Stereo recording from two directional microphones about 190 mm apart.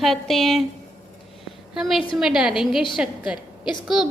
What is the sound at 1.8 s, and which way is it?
A woman's voice, centre (ahead or behind).